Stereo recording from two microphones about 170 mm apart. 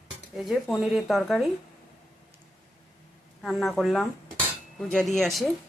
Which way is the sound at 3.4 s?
Centre (ahead or behind).